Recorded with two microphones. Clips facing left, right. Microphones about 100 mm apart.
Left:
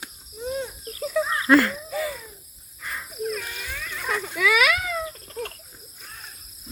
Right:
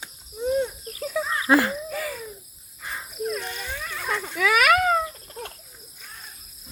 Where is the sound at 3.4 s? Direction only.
25° right (ahead or behind).